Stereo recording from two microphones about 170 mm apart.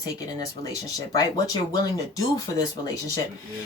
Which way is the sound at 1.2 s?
20° left (ahead or behind).